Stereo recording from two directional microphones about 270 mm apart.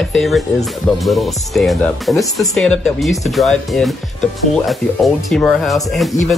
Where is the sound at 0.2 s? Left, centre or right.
Centre.